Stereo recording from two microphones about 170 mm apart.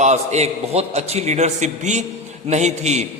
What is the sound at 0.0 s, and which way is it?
A man's voice, 40° right (ahead or behind).